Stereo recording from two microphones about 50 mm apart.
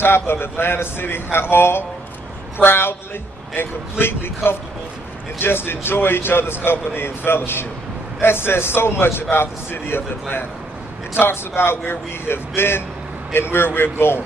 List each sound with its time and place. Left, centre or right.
0.0 s a man's voice: left
11.1 s a man's voice: left